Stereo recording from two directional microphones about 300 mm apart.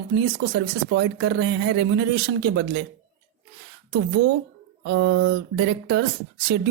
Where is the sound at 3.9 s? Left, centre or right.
Right.